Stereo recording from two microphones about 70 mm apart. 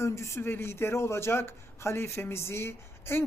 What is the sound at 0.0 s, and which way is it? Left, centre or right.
Speech, left.